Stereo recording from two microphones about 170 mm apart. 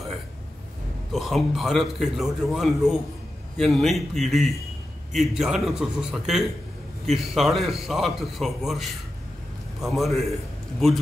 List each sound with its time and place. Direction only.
1.1 s a man's voice: centre (ahead or behind)